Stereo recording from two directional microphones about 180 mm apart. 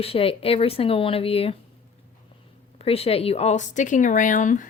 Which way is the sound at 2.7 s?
35° left (ahead or behind).